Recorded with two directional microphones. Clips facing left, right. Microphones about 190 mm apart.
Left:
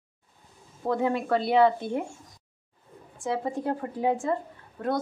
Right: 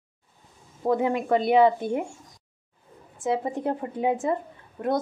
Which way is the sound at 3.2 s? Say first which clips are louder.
Right 3 dB; 20° right (ahead or behind).